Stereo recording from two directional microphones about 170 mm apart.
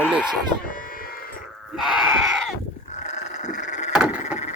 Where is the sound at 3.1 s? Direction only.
45° left (ahead or behind).